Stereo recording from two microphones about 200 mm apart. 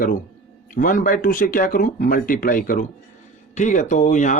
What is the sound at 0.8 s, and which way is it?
Speech, 45° left (ahead or behind).